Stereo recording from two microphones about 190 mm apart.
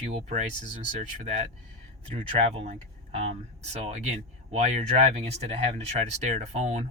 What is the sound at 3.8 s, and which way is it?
Speech, 35° right (ahead or behind).